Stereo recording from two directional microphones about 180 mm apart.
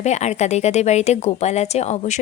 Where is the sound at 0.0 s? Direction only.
40° left (ahead or behind).